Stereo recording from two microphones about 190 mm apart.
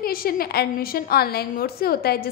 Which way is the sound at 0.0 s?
50° left (ahead or behind).